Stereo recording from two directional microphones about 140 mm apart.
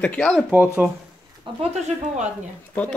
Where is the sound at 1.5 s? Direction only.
40° right (ahead or behind).